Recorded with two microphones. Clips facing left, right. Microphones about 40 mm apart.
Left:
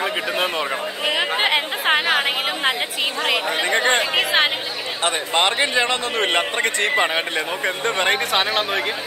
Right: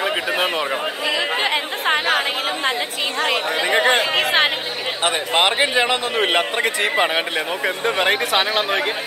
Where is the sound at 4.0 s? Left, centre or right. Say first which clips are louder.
Right 1 dB; right.